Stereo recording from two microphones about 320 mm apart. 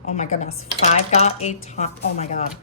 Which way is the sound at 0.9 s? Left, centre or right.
Left.